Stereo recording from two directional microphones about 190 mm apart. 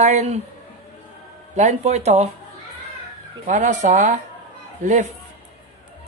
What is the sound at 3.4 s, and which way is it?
Speech, 40° right (ahead or behind).